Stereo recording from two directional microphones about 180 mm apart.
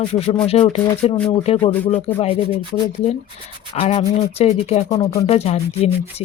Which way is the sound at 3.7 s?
35° left (ahead or behind).